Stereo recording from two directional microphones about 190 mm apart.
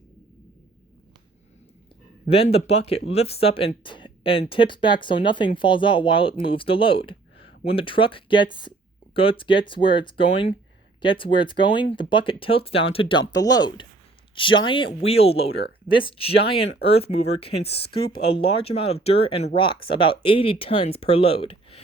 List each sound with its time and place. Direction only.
2.2 s speech: 30° left (ahead or behind)